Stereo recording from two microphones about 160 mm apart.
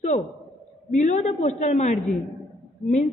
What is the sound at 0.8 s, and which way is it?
A woman's voice, 50° left (ahead or behind).